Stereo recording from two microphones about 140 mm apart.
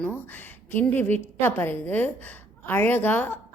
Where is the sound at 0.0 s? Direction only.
15° left (ahead or behind).